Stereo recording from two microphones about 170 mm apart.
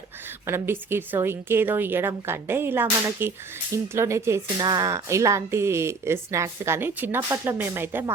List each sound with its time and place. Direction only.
0.4 s speech: 15° right (ahead or behind)